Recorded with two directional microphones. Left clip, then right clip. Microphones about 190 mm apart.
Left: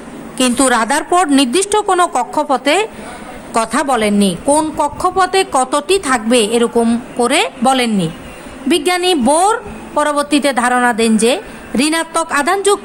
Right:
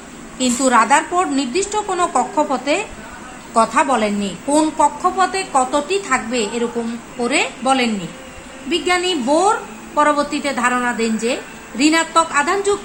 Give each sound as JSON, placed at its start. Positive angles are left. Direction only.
{"t": 0.3, "sound": "a woman's voice", "side_deg": 60}